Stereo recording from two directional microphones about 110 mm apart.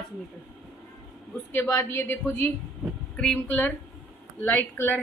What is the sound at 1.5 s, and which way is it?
Speech, 20° left (ahead or behind).